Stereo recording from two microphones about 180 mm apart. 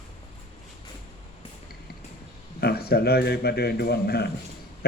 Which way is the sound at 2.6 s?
60° left (ahead or behind).